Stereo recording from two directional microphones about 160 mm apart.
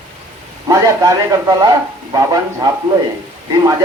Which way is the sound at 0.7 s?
20° right (ahead or behind).